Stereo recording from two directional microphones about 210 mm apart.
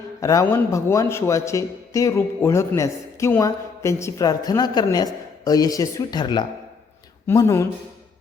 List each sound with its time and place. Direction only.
0.2 s a man's voice: 15° left (ahead or behind)